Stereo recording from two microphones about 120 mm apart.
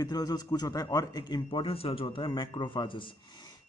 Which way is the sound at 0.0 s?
30° left (ahead or behind).